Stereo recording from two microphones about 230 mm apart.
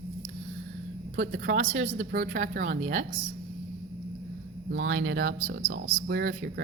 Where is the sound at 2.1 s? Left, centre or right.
Right.